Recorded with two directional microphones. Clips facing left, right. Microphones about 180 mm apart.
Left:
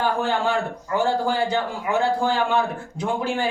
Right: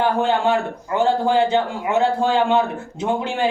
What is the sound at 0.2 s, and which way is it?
A man's voice, 25° right (ahead or behind).